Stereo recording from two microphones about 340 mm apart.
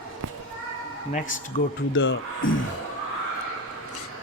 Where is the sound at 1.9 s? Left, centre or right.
Left.